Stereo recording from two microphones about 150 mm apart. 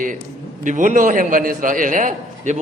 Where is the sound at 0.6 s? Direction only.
55° right (ahead or behind).